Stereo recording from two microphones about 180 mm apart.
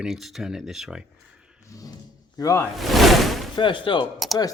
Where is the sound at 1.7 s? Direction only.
20° left (ahead or behind).